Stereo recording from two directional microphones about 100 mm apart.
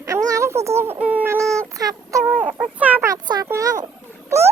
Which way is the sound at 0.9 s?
15° right (ahead or behind).